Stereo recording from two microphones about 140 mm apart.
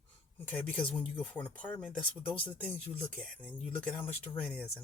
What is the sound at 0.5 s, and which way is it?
Speech, 10° left (ahead or behind).